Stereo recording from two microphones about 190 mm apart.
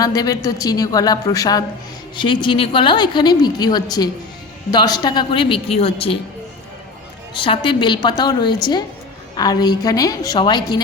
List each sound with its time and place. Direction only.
0.0 s a woman's voice: 20° left (ahead or behind)
7.3 s a woman's voice: 25° left (ahead or behind)